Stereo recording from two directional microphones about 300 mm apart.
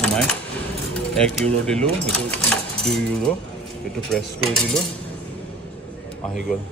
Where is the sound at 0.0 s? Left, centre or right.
Centre.